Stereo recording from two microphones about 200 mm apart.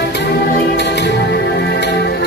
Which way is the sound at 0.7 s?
60° left (ahead or behind).